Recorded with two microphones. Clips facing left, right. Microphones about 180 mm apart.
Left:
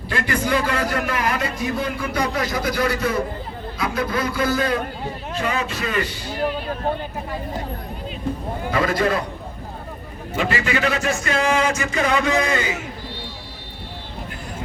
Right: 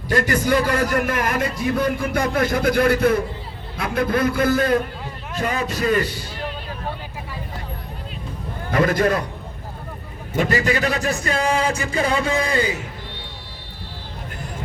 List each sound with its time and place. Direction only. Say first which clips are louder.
0.1 s a man's voice: right 3 dB; 40° right (ahead or behind)
5.4 s speech: right 2 dB; 40° right (ahead or behind)
6.4 s vehicle: left 8 dB; 50° left (ahead or behind)
8.7 s a man's voice: right 2 dB; 50° right (ahead or behind)
10.3 s speech: right 2 dB; 40° right (ahead or behind)